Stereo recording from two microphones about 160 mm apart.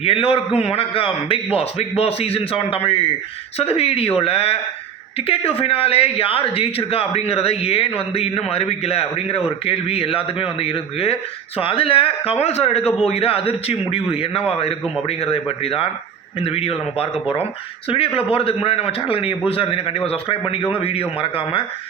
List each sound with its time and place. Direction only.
0.0 s speech: 35° left (ahead or behind)